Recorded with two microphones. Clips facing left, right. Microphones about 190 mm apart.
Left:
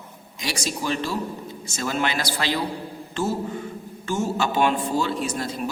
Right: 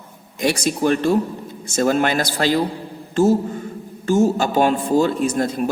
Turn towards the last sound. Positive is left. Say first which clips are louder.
# right 7 dB
turn(degrees=-50)  # may be behind; listen again after turning